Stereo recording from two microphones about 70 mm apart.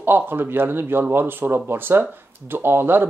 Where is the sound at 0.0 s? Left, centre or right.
Right.